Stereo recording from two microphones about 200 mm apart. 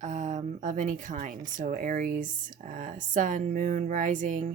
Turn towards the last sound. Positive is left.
turn(degrees=-40)  # may be behind; listen again after turning